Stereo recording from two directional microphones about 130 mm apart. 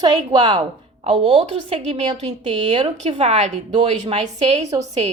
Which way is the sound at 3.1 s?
50° right (ahead or behind).